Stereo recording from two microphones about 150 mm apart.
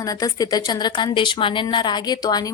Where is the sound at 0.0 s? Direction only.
25° left (ahead or behind).